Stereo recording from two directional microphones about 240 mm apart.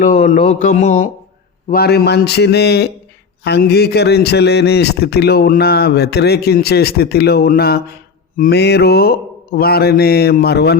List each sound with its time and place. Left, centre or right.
0.0 s mantra: left
1.7 s a man's voice: left